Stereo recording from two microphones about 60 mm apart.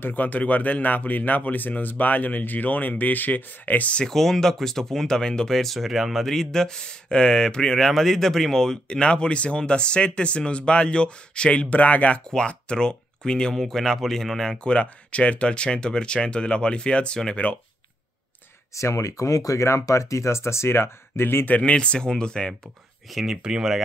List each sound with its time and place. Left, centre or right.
0.0 s speech: left
4.0 s speech: centre; by 12.2 s left
12.3 s speech: centre
14.6 s speech: centre
18.8 s speech: left
21.5 s speech: left
23.1 s speech: centre